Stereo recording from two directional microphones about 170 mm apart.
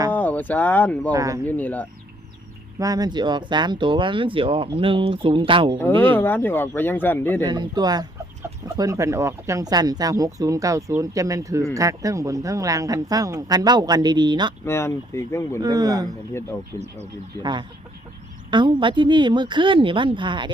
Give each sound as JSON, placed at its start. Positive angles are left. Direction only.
{"t": 0.1, "sound": "speech", "side_deg": 10}
{"t": 1.1, "sound": "speech", "side_deg": -20}
{"t": 1.5, "sound": "speech", "side_deg": 10}
{"t": 2.7, "sound": "speech", "side_deg": -20}
{"t": 6.0, "sound": "speech", "side_deg": 10}
{"t": 7.4, "sound": "speech", "side_deg": -25}
{"t": 14.6, "sound": "speech", "side_deg": 15}
{"t": 15.6, "sound": "speech", "side_deg": -20}
{"t": 17.4, "sound": "speech", "side_deg": -25}